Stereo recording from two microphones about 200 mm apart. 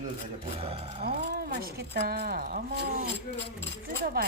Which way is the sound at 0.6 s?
30° right (ahead or behind).